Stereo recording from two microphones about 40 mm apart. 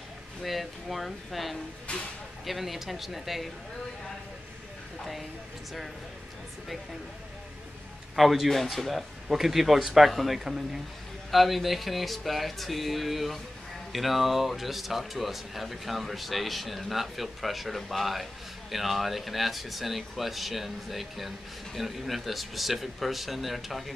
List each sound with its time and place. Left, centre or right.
0.4 s speech: centre
1.9 s speech: left
2.4 s speech: centre
8.2 s speech: centre